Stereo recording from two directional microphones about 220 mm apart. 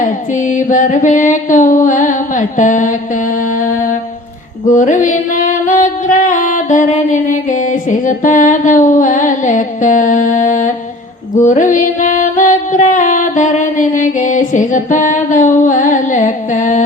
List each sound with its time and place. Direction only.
0.3 s music: 35° left (ahead or behind)